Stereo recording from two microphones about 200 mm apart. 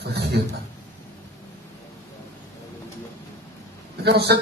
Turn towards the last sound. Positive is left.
turn(degrees=-55)  # may be behind; listen again after turning